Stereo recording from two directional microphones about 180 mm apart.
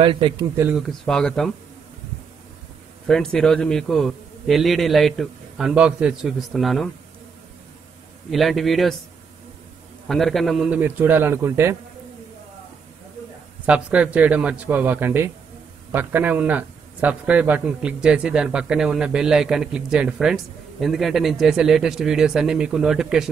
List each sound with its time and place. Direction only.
0.0 s a man's voice: 30° right (ahead or behind)
0.7 s a man's voice: centre (ahead or behind)
3.1 s a man's voice: 5° left (ahead or behind)
8.3 s a man's voice: centre (ahead or behind)
10.0 s a man's voice: centre (ahead or behind); by 11.7 s 15° right (ahead or behind)
13.7 s a man's voice: 5° right (ahead or behind)